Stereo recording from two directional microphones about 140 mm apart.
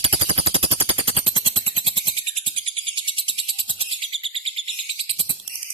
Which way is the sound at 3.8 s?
40° right (ahead or behind).